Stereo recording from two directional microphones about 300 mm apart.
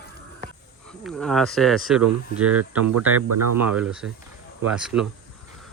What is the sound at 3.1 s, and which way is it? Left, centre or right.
Speech, right.